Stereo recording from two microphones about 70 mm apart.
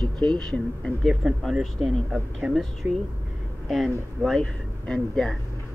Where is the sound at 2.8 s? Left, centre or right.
Right.